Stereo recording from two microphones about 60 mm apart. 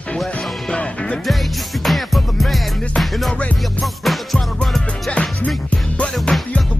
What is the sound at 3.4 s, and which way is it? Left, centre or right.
Music, left.